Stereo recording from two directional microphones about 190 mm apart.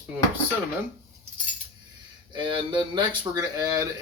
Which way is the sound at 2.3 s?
25° right (ahead or behind).